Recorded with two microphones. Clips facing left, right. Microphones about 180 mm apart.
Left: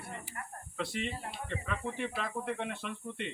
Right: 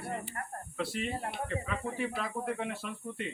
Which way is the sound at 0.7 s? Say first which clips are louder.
Right 2 dB; centre (ahead or behind).